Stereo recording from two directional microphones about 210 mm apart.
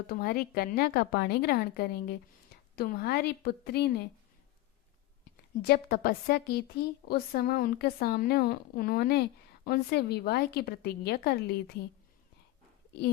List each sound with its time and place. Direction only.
0.1 s speech: 45° left (ahead or behind)
5.6 s speech: 45° left (ahead or behind)